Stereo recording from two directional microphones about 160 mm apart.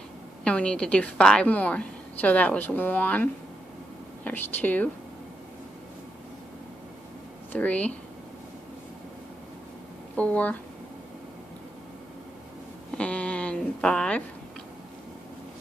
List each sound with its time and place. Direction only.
0.4 s a woman's voice: 5° left (ahead or behind)
7.5 s a woman's voice: 10° left (ahead or behind)
10.1 s a woman's voice: 10° left (ahead or behind)
12.9 s a sound: 5° left (ahead or behind)